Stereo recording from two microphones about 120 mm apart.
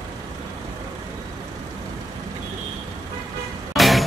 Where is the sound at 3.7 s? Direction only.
Centre (ahead or behind).